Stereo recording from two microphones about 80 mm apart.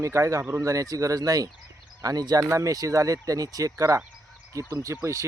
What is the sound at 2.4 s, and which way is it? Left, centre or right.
Speech, right.